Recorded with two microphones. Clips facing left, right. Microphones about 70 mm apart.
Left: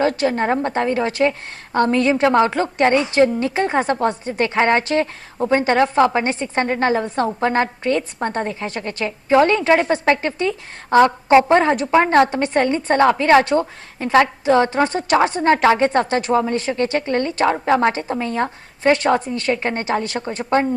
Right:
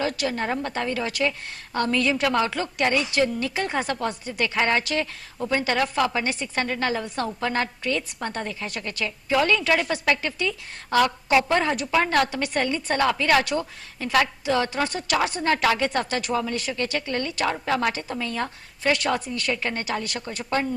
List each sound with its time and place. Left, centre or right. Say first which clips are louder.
0.0 s a woman's voice: left 8 dB; left